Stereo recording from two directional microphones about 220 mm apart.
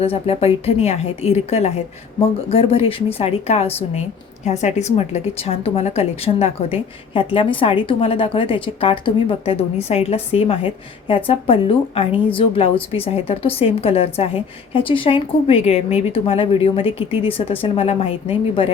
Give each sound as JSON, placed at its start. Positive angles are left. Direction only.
{"t": 0.0, "sound": "a woman's voice", "side_deg": 25}